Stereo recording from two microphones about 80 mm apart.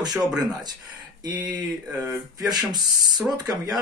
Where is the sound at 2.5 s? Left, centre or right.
Right.